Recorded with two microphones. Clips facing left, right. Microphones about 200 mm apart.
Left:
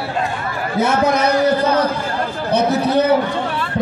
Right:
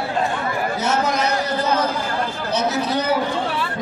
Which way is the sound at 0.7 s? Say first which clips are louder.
Left 8 dB; 55° left (ahead or behind).